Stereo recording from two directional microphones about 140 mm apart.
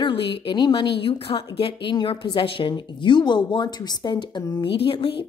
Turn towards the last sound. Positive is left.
turn(degrees=40)  # may be behind; listen again after turning